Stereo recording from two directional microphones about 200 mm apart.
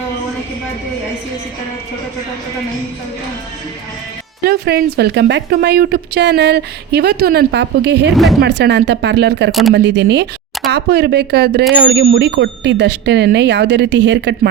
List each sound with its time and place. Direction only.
4.4 s a woman's voice: 55° right (ahead or behind)
8.1 s speech: centre (ahead or behind)
8.4 s a woman's voice: 55° right (ahead or behind)
9.5 s speech: centre (ahead or behind)
9.7 s a woman's voice: 60° right (ahead or behind)